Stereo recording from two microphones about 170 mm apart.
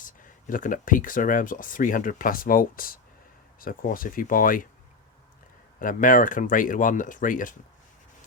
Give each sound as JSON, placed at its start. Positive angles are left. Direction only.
{"t": 0.2, "sound": "speech", "side_deg": 50}
{"t": 5.8, "sound": "speech", "side_deg": 55}